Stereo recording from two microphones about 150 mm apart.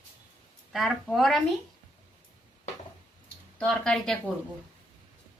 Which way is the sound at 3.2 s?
5° left (ahead or behind).